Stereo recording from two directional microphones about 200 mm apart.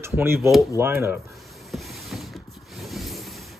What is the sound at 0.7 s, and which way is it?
Speech, 15° right (ahead or behind).